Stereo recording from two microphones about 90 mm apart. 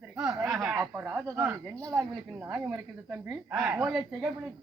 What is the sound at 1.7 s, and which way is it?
Speech, 10° left (ahead or behind).